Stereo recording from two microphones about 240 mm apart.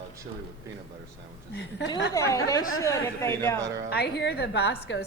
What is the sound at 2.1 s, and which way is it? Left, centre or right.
A woman's voice, centre.